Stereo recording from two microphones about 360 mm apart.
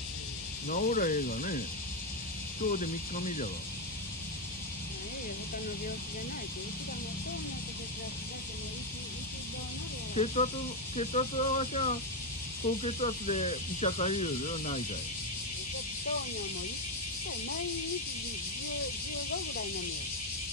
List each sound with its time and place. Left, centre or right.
0.7 s speech: left
2.7 s speech: left
10.1 s speech: centre